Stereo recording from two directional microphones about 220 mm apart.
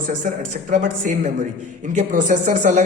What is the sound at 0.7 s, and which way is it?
Speech, 40° right (ahead or behind).